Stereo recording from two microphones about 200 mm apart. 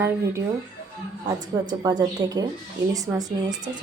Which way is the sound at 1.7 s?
20° right (ahead or behind).